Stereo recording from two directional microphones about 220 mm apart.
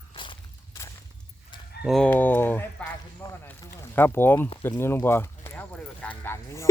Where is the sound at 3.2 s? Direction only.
10° left (ahead or behind).